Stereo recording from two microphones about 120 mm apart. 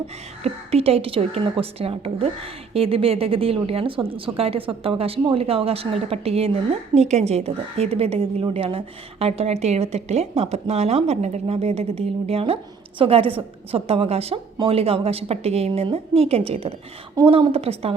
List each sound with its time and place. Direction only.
0.4 s a woman's voice: 55° right (ahead or behind)